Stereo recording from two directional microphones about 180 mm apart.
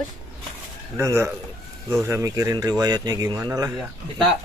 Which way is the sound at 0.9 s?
15° right (ahead or behind).